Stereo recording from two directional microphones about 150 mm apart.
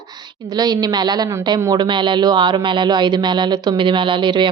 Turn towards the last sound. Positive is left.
turn(degrees=-30)  # may be behind; listen again after turning